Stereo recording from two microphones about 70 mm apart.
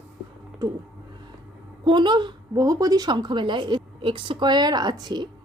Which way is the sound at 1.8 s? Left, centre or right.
Right.